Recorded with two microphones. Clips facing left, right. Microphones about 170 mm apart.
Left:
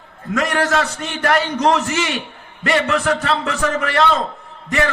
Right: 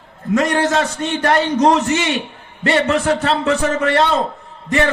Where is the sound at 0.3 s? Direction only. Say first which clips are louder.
Right 2 dB; 25° right (ahead or behind).